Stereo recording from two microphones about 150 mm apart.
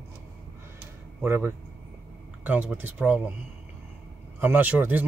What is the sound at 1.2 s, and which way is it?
Speech, 15° right (ahead or behind).